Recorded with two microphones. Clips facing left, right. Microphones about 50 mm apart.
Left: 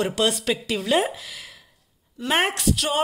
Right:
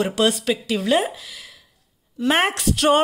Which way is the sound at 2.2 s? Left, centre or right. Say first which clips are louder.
Right 3 dB; centre.